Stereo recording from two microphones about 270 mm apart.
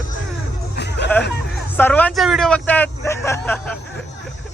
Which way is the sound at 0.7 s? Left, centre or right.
Left.